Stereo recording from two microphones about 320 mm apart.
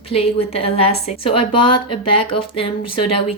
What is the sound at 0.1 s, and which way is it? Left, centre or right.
Speech, centre.